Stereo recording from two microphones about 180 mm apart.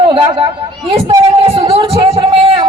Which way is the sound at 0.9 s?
30° right (ahead or behind).